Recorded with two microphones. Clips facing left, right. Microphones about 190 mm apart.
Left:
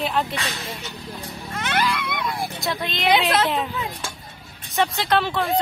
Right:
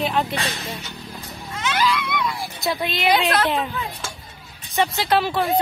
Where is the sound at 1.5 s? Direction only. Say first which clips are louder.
Right 2 dB; 55° left (ahead or behind).